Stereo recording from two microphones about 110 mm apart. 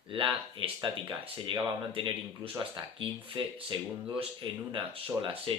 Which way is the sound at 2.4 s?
50° right (ahead or behind).